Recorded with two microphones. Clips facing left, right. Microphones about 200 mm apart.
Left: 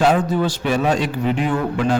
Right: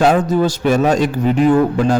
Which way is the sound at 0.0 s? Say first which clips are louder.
Right 3 dB; 45° right (ahead or behind).